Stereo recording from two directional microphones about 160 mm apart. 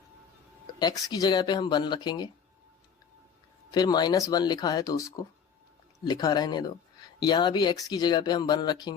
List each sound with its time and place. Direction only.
0.8 s speech: 25° left (ahead or behind)
3.7 s speech: 25° left (ahead or behind)